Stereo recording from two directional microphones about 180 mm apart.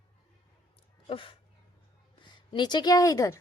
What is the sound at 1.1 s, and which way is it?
A woman's voice, 30° left (ahead or behind).